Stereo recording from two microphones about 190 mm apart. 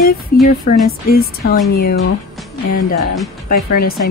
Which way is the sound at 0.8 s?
50° left (ahead or behind).